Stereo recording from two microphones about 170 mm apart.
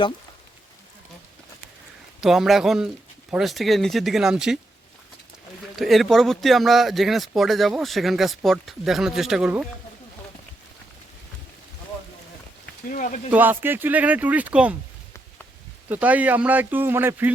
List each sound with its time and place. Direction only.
2.2 s speech: centre (ahead or behind)
5.7 s speech: centre (ahead or behind)
12.9 s speech: 50° left (ahead or behind)
13.3 s speech: 10° right (ahead or behind)
15.9 s speech: 10° right (ahead or behind)